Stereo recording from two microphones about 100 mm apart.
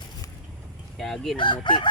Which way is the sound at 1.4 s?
50° left (ahead or behind).